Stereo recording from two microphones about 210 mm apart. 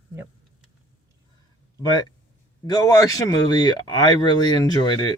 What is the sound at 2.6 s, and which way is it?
Speech, 15° left (ahead or behind).